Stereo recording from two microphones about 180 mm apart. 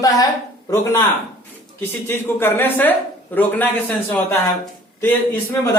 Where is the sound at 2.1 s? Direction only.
10° left (ahead or behind).